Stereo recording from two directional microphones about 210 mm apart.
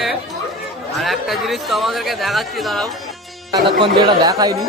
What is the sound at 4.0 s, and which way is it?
Speech, 20° right (ahead or behind).